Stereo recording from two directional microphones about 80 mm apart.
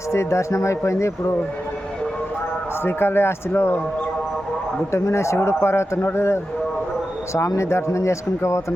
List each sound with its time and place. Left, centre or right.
0.1 s a man's voice: left
2.8 s speech: left
4.9 s a man's voice: left